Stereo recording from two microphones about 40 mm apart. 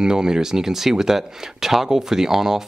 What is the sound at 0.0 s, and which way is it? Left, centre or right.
Speech, centre.